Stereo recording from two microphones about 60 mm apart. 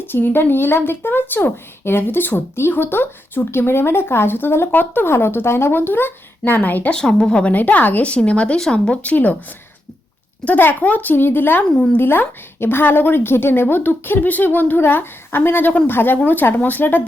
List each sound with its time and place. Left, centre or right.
0.0 s speech: left
6.9 s a woman's voice: centre
7.5 s speech: left
10.4 s speech: left